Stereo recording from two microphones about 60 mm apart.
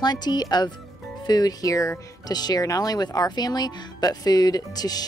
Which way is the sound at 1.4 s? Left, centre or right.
Left.